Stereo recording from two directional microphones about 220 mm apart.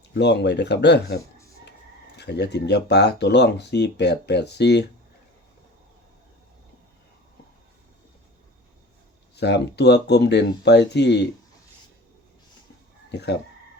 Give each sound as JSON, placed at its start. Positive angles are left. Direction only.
{"t": 0.1, "sound": "speech", "side_deg": 50}
{"t": 9.3, "sound": "speech", "side_deg": 50}
{"t": 13.1, "sound": "speech", "side_deg": 50}